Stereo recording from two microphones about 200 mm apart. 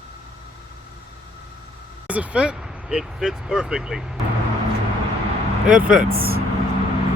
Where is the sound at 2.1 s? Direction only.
5° right (ahead or behind).